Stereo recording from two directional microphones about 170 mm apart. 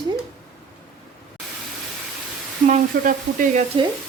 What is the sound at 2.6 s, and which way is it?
Frying, 50° right (ahead or behind).